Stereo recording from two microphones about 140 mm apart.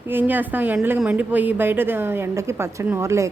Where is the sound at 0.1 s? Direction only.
15° right (ahead or behind).